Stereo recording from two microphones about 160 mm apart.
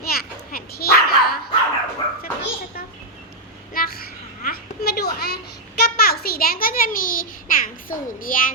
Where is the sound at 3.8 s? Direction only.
65° left (ahead or behind).